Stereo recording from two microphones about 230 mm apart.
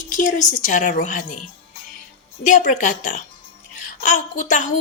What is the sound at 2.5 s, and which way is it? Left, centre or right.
A woman's voice, left.